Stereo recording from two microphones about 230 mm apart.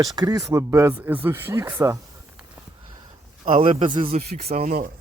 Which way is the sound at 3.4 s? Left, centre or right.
Right.